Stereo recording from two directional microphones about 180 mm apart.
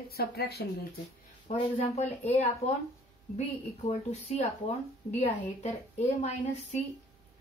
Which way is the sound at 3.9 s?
40° left (ahead or behind).